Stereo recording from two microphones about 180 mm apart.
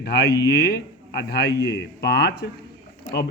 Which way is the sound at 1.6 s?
70° left (ahead or behind).